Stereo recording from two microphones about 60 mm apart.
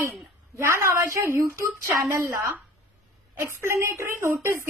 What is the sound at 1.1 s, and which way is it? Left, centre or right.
Speech, right.